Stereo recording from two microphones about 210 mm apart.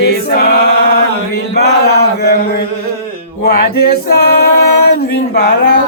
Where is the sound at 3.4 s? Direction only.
45° left (ahead or behind).